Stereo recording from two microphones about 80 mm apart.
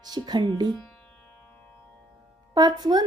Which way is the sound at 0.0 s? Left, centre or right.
Right.